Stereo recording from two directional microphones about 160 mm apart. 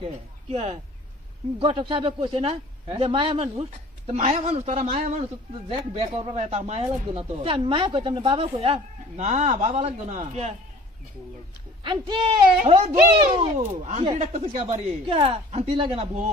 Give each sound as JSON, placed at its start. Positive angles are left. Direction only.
{"t": 0.5, "sound": "speech", "side_deg": -40}
{"t": 11.8, "sound": "speech", "side_deg": -30}
{"t": 13.1, "sound": "speech", "side_deg": -30}
{"t": 13.6, "sound": "speech", "side_deg": -45}
{"t": 15.0, "sound": "speech", "side_deg": -35}